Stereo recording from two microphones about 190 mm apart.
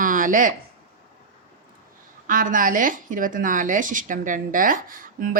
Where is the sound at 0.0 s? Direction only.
45° right (ahead or behind).